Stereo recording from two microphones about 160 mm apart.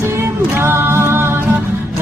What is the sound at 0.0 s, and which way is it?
Music, 15° right (ahead or behind).